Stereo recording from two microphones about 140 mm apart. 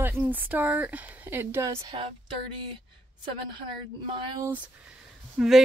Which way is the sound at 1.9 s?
45° right (ahead or behind).